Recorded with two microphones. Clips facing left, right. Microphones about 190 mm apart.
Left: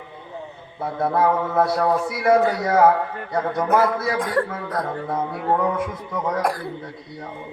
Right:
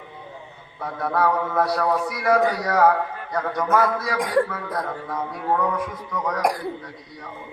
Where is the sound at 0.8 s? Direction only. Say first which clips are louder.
Left 3 dB; 25° left (ahead or behind).